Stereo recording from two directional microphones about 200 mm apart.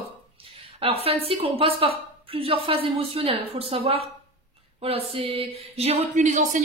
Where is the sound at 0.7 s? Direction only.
30° right (ahead or behind).